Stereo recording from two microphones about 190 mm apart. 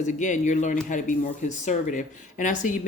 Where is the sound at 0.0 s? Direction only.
40° left (ahead or behind).